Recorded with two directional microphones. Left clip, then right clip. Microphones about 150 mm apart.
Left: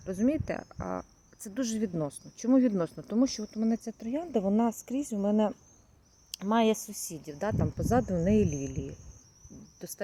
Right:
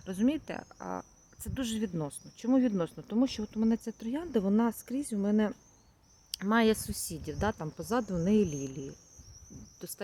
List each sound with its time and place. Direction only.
0.0 s speech: centre (ahead or behind)
9.8 s speech: centre (ahead or behind)